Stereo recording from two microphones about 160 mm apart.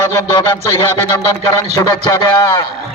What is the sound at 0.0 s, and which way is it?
A man's voice, 25° left (ahead or behind).